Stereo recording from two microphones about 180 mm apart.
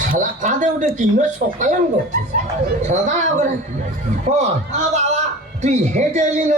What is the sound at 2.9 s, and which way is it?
A man's voice, 40° right (ahead or behind).